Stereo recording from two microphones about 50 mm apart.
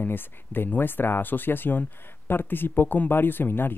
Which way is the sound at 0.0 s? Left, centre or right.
Left.